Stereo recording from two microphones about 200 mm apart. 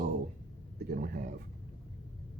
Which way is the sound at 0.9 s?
55° right (ahead or behind).